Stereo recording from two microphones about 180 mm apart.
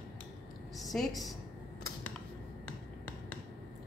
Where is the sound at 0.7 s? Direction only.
Centre (ahead or behind).